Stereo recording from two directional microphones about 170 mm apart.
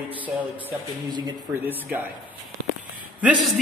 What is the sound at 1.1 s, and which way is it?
Speech, 25° right (ahead or behind).